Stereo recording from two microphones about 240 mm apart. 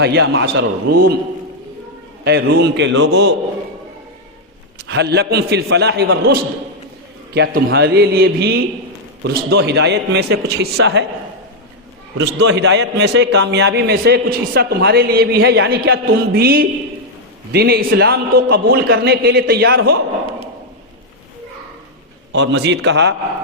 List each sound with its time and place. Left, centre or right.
0.0 s a man's voice: right
2.2 s a man's voice: right
4.8 s a man's voice: right
12.1 s a man's voice: right
22.3 s a man's voice: right